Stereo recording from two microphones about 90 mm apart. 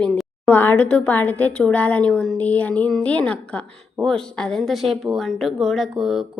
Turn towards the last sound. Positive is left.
turn(degrees=0)  # may be behind; listen again after turning